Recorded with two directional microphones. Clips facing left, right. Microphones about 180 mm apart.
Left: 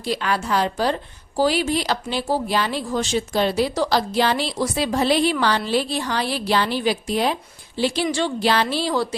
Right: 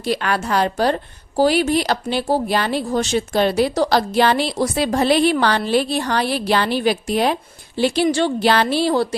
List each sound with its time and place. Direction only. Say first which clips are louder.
0.0 s a woman's voice: right 3 dB; 60° right (ahead or behind)